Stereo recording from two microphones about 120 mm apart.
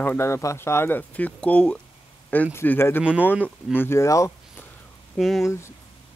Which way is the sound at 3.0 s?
10° right (ahead or behind).